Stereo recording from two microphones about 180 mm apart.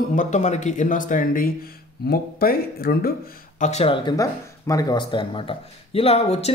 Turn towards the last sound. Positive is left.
turn(degrees=35)  # may be behind; listen again after turning